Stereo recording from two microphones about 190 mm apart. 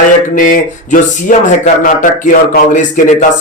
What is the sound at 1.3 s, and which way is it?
A man's voice, 45° left (ahead or behind).